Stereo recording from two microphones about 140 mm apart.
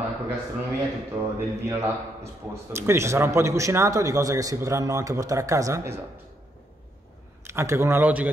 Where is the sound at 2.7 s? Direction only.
20° right (ahead or behind).